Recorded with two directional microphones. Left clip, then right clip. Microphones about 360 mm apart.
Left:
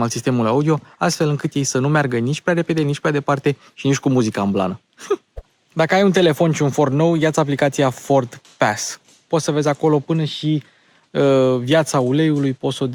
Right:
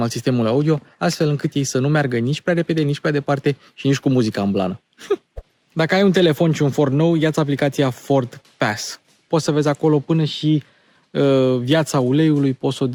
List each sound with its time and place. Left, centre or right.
0.0 s speech: centre